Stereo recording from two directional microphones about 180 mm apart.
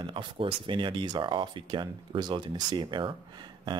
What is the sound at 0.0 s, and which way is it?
Speech, 30° right (ahead or behind).